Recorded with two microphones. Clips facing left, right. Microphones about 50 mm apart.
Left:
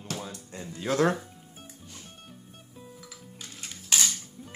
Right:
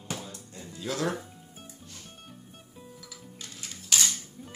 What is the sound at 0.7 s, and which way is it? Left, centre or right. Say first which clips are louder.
Speech: left 6 dB; left.